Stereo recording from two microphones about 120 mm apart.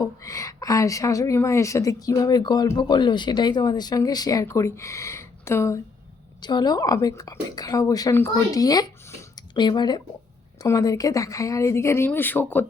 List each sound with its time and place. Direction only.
0.2 s a woman's voice: 25° left (ahead or behind)
6.4 s speech: 35° left (ahead or behind)
8.6 s a sound: 30° left (ahead or behind)
10.6 s a woman's voice: 30° left (ahead or behind); by 12.6 s 15° left (ahead or behind)